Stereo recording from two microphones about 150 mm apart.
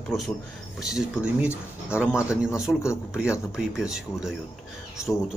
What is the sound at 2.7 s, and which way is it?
Speech, 20° left (ahead or behind).